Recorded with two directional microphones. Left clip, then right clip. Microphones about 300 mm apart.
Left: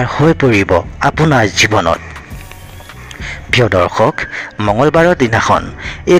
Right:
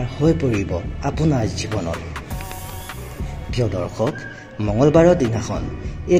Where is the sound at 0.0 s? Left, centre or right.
Left.